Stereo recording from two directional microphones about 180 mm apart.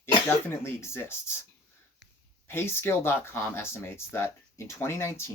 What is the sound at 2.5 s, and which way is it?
Speech, 15° left (ahead or behind).